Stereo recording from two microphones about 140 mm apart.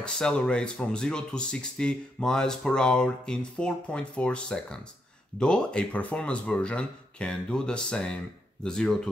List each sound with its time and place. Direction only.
0.0 s speech: 5° left (ahead or behind)